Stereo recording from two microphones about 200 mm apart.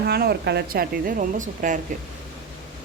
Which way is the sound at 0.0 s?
50° right (ahead or behind).